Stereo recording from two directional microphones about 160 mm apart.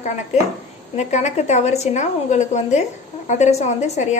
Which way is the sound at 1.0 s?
45° left (ahead or behind).